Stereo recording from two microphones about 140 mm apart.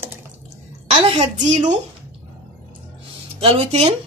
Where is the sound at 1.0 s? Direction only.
50° right (ahead or behind).